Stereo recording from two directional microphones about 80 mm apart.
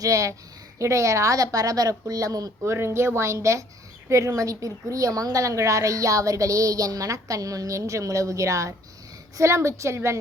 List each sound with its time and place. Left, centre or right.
0.0 s a woman's voice: right
2.7 s a woman's voice: right